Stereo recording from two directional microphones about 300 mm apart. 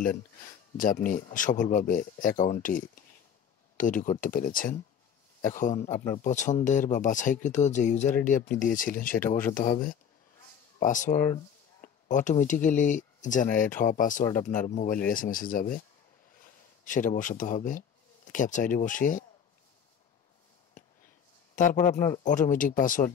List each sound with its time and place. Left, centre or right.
0.4 s speech: left
10.8 s speech: left
21.5 s speech: left